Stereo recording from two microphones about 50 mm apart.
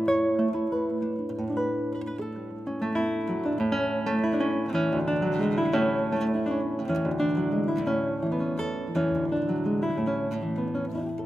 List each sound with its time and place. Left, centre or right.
0.0 s music: centre
0.4 s music: centre
2.9 s music: centre
8.9 s guitar: centre